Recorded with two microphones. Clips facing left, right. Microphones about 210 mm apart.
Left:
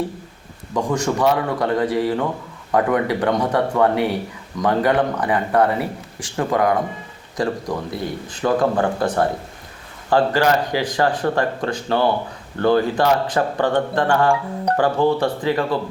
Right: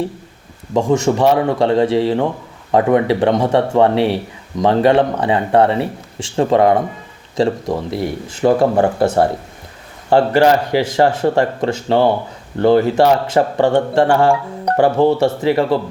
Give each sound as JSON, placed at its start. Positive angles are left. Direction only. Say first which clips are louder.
{"t": 0.7, "sound": "speech", "louder": "right 6 dB", "side_deg": -25}